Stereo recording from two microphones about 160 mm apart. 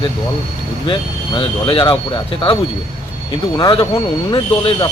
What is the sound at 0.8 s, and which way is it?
Speech, 35° left (ahead or behind).